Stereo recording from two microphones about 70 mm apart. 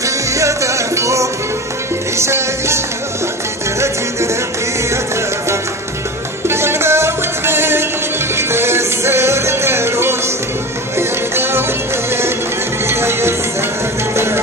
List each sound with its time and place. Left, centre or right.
0.0 s music: right
6.4 s music: right